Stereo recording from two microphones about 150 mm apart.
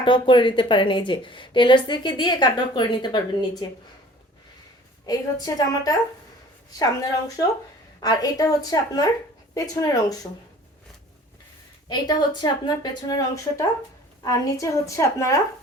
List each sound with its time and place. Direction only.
0.0 s a woman's voice: 35° left (ahead or behind)
5.0 s a woman's voice: 25° left (ahead or behind)
11.9 s a woman's voice: 30° left (ahead or behind)